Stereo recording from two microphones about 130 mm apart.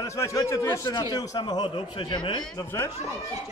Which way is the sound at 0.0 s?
25° left (ahead or behind).